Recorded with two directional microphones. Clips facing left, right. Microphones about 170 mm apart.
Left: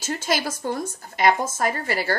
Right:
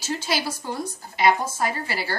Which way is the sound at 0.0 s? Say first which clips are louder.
Left 2 dB; 45° left (ahead or behind).